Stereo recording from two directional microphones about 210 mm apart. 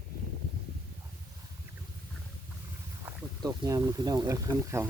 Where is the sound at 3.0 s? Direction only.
15° right (ahead or behind).